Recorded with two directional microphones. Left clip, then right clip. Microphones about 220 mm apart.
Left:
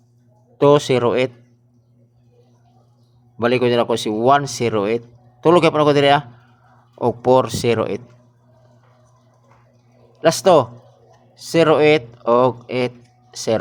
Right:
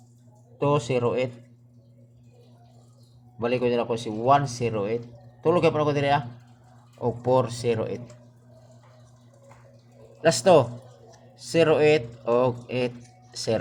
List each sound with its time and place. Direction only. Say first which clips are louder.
0.6 s speech: left 10 dB; 35° left (ahead or behind)
3.3 s speech: left 8 dB; 35° left (ahead or behind)
10.1 s speech: left 5 dB; 25° left (ahead or behind)